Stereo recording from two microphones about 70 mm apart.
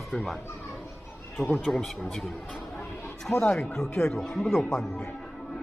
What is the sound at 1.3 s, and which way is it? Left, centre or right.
Speech, centre.